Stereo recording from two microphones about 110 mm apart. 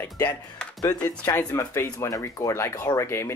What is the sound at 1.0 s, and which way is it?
Speech, 15° left (ahead or behind).